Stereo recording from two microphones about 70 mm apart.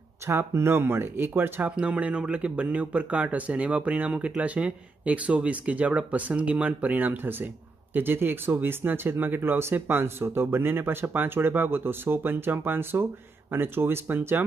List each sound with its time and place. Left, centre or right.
0.3 s speech: right
1.8 s speech: centre